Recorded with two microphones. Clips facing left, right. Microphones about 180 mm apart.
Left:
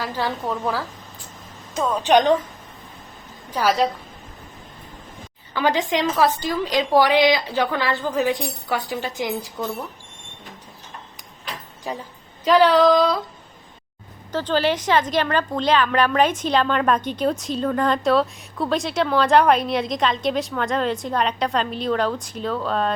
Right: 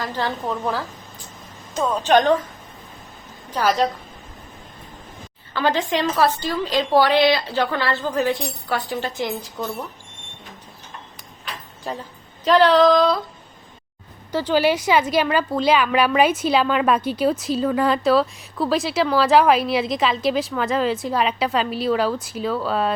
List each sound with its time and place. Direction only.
0.0 s a woman's voice: 10° left (ahead or behind)
2.0 s a woman's voice: 15° left (ahead or behind)
3.5 s a woman's voice: 10° left (ahead or behind)
5.5 s a woman's voice: 15° left (ahead or behind)
11.9 s a woman's voice: 10° left (ahead or behind)
14.3 s a woman's voice: 10° right (ahead or behind)